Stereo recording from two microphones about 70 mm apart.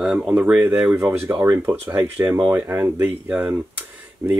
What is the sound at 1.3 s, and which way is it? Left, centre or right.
Speech, right.